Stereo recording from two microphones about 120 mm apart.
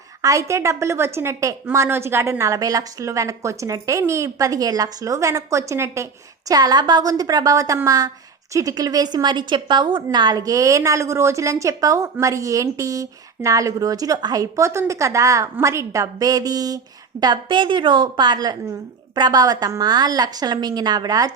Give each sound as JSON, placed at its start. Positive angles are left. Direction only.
{"t": 0.2, "sound": "a woman's voice", "side_deg": -25}
{"t": 6.5, "sound": "a woman's voice", "side_deg": -35}